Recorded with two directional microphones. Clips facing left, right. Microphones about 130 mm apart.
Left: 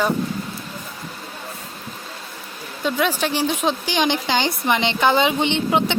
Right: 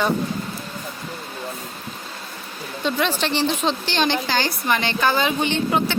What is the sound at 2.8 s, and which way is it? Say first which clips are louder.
A woman's voice: left 1 dB; 10° left (ahead or behind).